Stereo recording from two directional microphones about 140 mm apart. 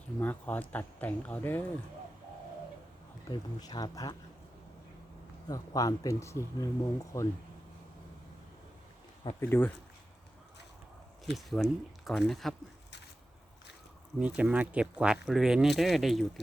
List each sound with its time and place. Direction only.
0.2 s speech: 10° left (ahead or behind)
3.2 s speech: 30° left (ahead or behind)
5.5 s speech: 25° left (ahead or behind)
9.4 s speech: 15° left (ahead or behind)
11.3 s speech: centre (ahead or behind)
14.2 s speech: 10° right (ahead or behind)